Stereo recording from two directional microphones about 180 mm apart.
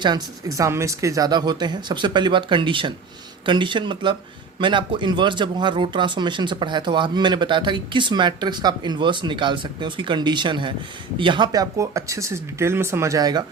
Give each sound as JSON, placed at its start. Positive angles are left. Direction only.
{"t": 0.0, "sound": "speech", "side_deg": -20}